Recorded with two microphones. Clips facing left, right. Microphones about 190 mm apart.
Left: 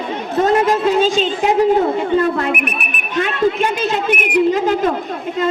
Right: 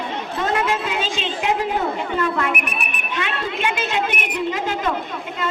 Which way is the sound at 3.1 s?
40° left (ahead or behind).